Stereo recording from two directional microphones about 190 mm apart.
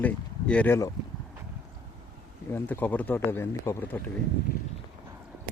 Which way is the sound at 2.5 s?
10° left (ahead or behind).